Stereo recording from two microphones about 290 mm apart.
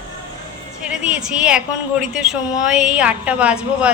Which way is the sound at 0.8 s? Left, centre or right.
Centre.